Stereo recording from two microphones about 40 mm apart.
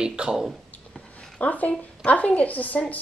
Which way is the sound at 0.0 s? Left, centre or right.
Right.